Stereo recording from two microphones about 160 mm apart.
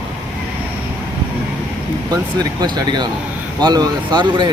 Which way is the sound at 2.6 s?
25° right (ahead or behind).